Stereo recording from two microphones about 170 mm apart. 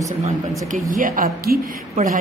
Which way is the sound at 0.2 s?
50° right (ahead or behind).